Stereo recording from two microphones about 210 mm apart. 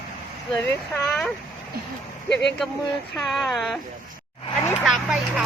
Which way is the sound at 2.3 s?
55° left (ahead or behind).